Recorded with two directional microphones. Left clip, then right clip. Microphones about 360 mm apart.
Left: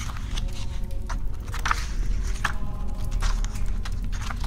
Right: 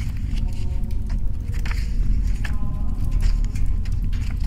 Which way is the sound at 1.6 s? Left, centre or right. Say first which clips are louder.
Left 10 dB; left.